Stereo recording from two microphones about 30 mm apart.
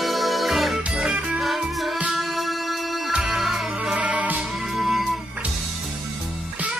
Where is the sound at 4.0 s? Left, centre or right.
Right.